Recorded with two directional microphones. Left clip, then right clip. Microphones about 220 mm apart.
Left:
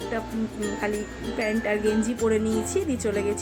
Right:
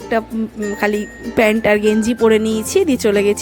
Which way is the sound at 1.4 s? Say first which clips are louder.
Right 12 dB; 45° right (ahead or behind).